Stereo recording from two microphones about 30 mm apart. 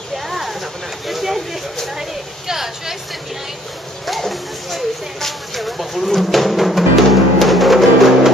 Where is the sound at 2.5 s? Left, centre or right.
Centre.